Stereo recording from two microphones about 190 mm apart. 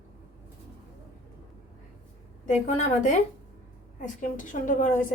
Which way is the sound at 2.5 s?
40° left (ahead or behind).